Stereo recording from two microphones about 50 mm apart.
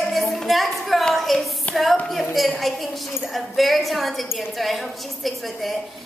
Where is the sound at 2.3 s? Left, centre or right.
Centre.